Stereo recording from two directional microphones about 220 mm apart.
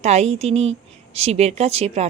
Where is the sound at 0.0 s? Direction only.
30° right (ahead or behind).